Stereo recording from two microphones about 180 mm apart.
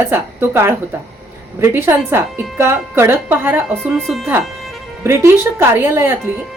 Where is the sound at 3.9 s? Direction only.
Centre (ahead or behind).